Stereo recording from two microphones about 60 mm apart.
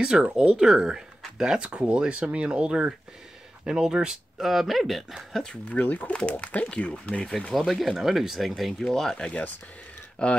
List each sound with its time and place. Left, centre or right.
0.0 s speech: centre
5.5 s speech: left
7.2 s speech: centre